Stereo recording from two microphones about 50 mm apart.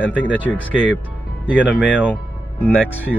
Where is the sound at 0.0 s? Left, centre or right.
Left.